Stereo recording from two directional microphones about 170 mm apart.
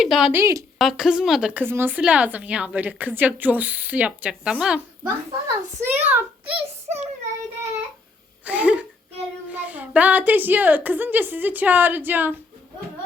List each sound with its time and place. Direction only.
0.0 s speech: 5° right (ahead or behind)
0.8 s speech: centre (ahead or behind)
5.0 s a child's voice: 15° right (ahead or behind)
6.6 s a sound: 40° right (ahead or behind)
8.4 s speech: 10° right (ahead or behind)